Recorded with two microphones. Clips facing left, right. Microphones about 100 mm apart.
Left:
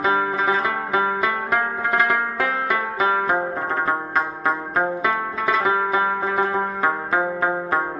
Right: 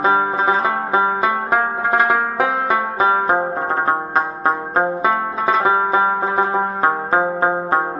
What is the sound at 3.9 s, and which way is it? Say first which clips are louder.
Music: right 4 dB; 30° right (ahead or behind).